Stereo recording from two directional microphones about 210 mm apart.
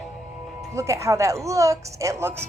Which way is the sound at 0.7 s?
15° right (ahead or behind).